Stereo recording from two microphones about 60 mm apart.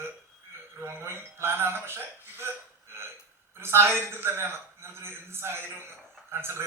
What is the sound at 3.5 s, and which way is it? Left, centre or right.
A woman's voice, right.